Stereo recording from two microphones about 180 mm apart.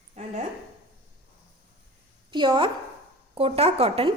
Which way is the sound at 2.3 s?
25° right (ahead or behind).